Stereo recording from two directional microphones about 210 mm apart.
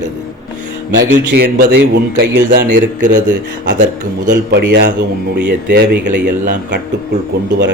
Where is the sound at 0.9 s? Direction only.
50° right (ahead or behind).